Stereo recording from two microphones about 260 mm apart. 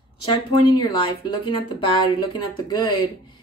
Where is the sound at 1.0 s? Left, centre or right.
Centre.